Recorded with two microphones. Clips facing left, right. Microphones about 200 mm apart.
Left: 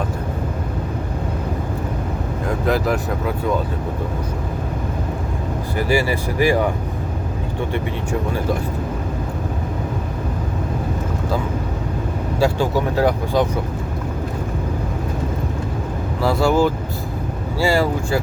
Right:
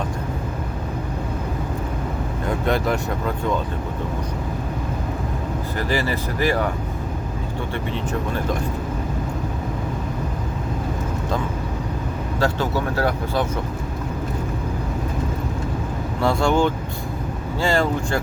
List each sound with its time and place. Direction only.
2.5 s speech: centre (ahead or behind)
5.7 s speech: 10° left (ahead or behind)
12.4 s speech: 15° left (ahead or behind)
16.2 s speech: 5° left (ahead or behind)